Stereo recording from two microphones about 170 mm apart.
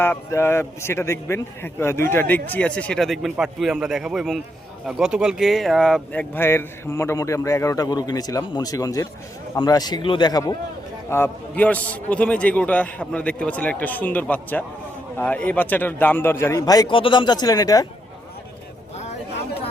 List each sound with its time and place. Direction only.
0.0 s a man's voice: 15° left (ahead or behind)
11.1 s a man's voice: 10° left (ahead or behind)